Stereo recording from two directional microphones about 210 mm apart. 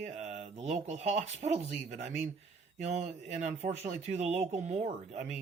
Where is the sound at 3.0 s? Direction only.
35° right (ahead or behind).